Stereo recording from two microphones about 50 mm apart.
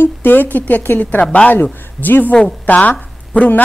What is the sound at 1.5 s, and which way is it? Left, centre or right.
Speech, left.